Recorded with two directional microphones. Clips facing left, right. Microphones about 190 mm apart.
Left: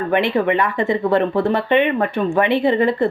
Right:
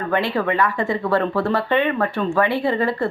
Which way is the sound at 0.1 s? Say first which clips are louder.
Left 3 dB; 20° left (ahead or behind).